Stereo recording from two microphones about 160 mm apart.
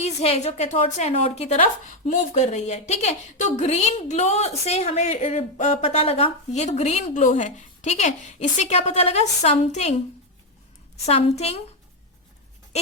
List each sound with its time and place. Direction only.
0.0 s a woman's voice: 40° left (ahead or behind)
11.0 s a woman's voice: 40° left (ahead or behind)
12.7 s a woman's voice: 45° left (ahead or behind)